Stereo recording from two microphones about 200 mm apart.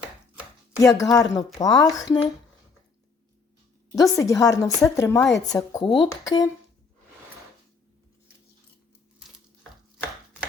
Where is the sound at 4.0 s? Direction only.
15° left (ahead or behind).